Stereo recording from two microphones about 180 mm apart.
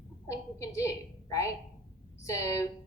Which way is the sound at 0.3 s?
15° left (ahead or behind).